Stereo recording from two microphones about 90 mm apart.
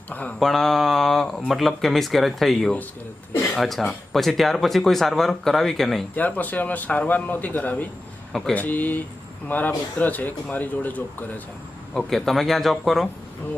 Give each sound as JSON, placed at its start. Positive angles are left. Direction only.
{"t": 0.1, "sound": "a sound", "side_deg": 15}
{"t": 0.3, "sound": "speech", "side_deg": 5}
{"t": 6.1, "sound": "speech", "side_deg": 20}
{"t": 8.3, "sound": "speech", "side_deg": 5}
{"t": 8.5, "sound": "speech", "side_deg": 20}
{"t": 11.9, "sound": "speech", "side_deg": 5}